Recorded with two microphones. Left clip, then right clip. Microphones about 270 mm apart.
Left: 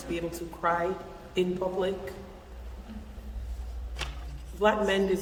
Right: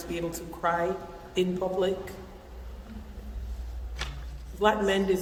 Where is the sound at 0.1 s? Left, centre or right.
Centre.